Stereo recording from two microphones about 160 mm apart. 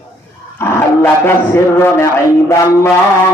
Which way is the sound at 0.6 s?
15° left (ahead or behind).